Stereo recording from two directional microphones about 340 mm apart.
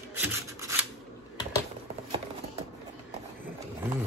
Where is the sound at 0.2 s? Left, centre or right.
Centre.